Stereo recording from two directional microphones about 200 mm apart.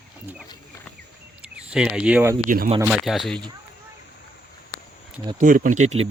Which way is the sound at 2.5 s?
45° right (ahead or behind).